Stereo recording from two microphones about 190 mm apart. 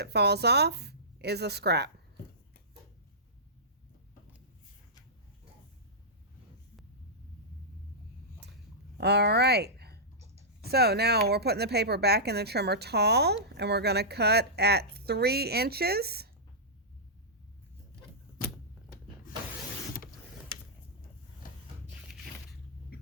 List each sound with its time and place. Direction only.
0.0 s speech: 60° right (ahead or behind)
9.0 s speech: 60° right (ahead or behind)